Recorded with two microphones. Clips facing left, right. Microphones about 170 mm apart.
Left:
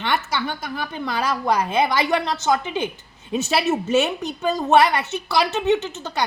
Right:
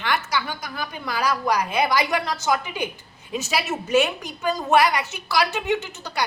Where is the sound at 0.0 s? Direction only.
25° left (ahead or behind).